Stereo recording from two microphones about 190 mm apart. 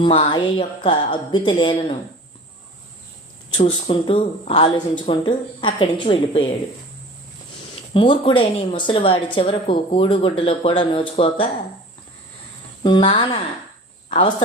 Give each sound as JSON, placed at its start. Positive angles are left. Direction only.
{"t": 0.0, "sound": "a woman's voice", "side_deg": 30}
{"t": 3.5, "sound": "a woman's voice", "side_deg": 30}
{"t": 7.9, "sound": "a woman's voice", "side_deg": 25}
{"t": 12.8, "sound": "a woman's voice", "side_deg": 25}